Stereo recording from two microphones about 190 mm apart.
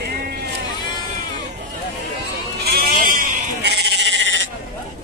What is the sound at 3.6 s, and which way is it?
Sheep, 65° right (ahead or behind).